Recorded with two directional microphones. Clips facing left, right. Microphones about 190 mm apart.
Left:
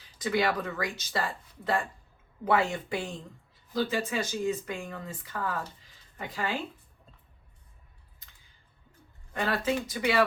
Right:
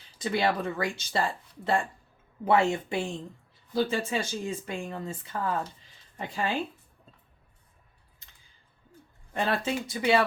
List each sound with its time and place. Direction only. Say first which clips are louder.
0.2 s speech: right 1 dB; 25° right (ahead or behind)
9.3 s speech: even; 25° right (ahead or behind)